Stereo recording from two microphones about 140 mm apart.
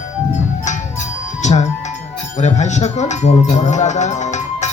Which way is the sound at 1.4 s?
55° left (ahead or behind).